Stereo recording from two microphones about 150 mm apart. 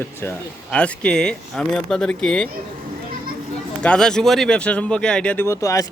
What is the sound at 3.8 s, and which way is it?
Speech, 5° left (ahead or behind).